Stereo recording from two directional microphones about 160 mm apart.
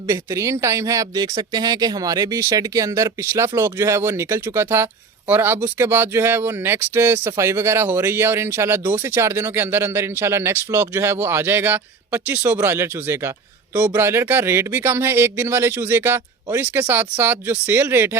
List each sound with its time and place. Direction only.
0.1 s speech: 20° right (ahead or behind)